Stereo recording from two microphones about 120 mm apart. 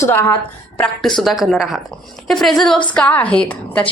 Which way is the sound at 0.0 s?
20° left (ahead or behind).